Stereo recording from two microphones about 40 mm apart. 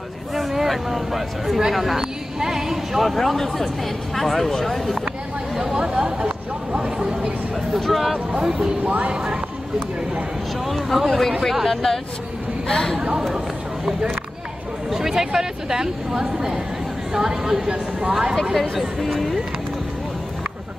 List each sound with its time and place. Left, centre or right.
0.3 s a woman's voice: centre
3.0 s speech: centre
5.6 s speech: centre
7.8 s speech: centre
8.3 s speech: right
10.7 s a woman's voice: centre
12.9 s speech: right
14.9 s a woman's voice: centre
18.3 s speech: centre